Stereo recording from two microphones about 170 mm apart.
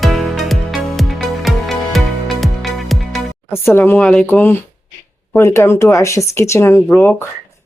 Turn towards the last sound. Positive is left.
turn(degrees=10)  # may be behind; listen again after turning